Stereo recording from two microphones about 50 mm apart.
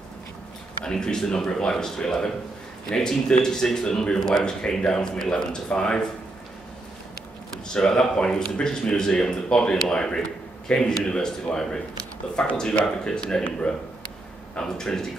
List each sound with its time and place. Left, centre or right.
0.8 s speech: centre
7.6 s speech: centre